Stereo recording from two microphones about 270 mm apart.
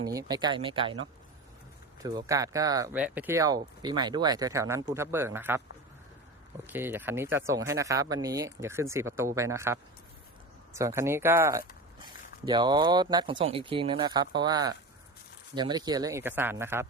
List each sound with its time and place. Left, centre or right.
0.0 s speech: centre
2.0 s speech: centre
6.7 s speech: centre
10.8 s speech: centre